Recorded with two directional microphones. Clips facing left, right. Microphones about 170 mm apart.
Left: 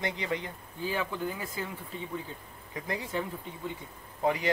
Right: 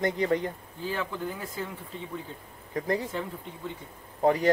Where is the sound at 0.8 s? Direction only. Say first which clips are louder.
Even; 10° left (ahead or behind).